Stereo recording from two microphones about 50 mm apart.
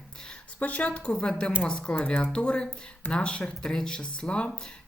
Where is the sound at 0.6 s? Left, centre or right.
Left.